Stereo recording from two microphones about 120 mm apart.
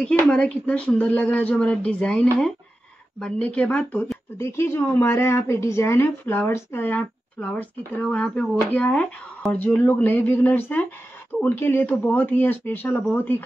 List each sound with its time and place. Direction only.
0.0 s speech: 10° left (ahead or behind)
4.4 s a woman's voice: 20° left (ahead or behind)